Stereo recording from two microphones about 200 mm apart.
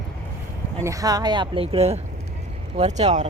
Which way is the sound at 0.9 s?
20° right (ahead or behind).